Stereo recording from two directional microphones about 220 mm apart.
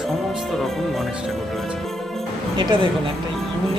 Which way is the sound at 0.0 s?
Centre (ahead or behind).